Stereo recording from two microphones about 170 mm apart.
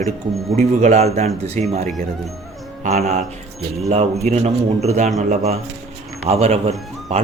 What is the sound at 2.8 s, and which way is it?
Speech, 45° right (ahead or behind).